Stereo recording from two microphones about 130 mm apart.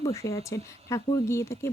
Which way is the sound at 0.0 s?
25° left (ahead or behind).